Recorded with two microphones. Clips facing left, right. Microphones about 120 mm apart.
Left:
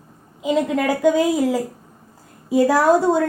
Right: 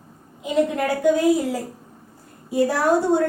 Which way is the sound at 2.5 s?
90° left.